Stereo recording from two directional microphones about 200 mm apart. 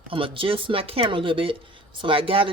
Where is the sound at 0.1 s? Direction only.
25° right (ahead or behind).